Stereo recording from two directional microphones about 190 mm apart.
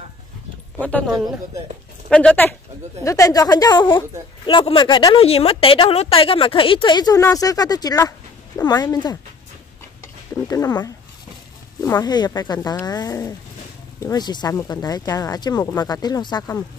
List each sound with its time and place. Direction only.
0.7 s speech: 10° left (ahead or behind)
1.1 s speech: 15° right (ahead or behind)
2.0 s a woman's voice: 5° left (ahead or behind)
10.5 s a woman's voice: 20° left (ahead or behind)